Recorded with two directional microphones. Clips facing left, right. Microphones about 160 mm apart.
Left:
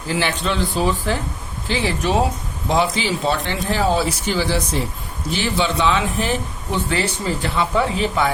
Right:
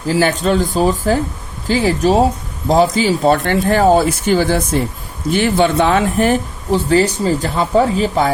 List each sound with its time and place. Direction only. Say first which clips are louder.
0.1 s speech: right 7 dB; 45° right (ahead or behind)
6.7 s speech: right 9 dB; 35° right (ahead or behind)